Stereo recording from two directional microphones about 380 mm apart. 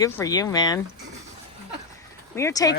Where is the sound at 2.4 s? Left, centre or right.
Centre.